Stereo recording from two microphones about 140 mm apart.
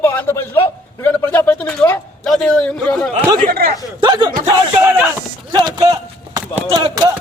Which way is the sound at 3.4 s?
90° right.